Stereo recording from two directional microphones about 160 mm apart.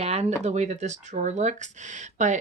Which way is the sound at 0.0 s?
40° right (ahead or behind).